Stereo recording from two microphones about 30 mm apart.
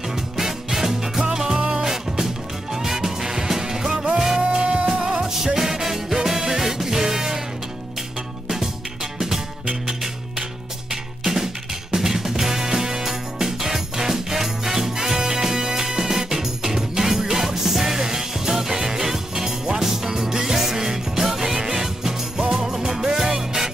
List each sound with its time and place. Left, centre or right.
0.1 s music: centre
10.9 s music: centre